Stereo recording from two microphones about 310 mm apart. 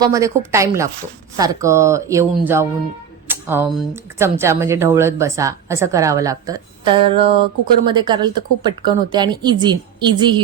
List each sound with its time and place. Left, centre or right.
0.0 s speech: centre